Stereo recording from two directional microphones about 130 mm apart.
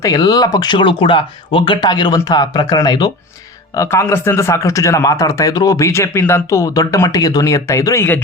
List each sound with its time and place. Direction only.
0.0 s speech: 30° left (ahead or behind)
3.8 s a man's voice: 20° left (ahead or behind)